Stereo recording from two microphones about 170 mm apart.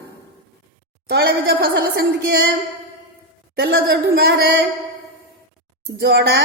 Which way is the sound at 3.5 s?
65° right (ahead or behind).